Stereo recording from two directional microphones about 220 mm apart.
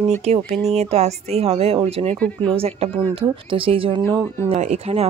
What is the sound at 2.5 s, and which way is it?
Speech, 25° right (ahead or behind).